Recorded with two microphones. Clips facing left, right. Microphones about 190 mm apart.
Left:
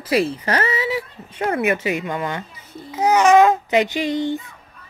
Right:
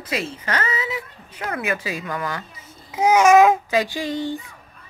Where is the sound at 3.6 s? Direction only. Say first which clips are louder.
Left 3 dB; 20° left (ahead or behind).